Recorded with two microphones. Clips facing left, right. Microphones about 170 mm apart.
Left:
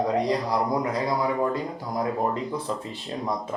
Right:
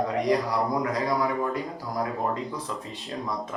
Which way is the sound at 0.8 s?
30° left (ahead or behind).